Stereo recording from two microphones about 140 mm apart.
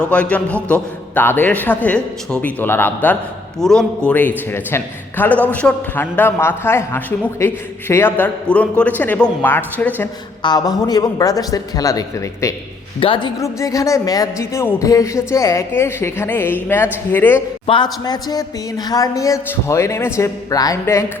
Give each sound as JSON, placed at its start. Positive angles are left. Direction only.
{"t": 0.0, "sound": "a man's voice", "side_deg": 10}
{"t": 10.4, "sound": "speech", "side_deg": 30}
{"t": 13.0, "sound": "a woman's voice", "side_deg": 35}
{"t": 13.4, "sound": "a man's voice", "side_deg": 25}
{"t": 17.7, "sound": "speech", "side_deg": 30}